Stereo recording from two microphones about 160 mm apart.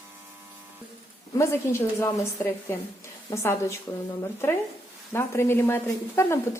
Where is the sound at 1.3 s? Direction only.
15° left (ahead or behind).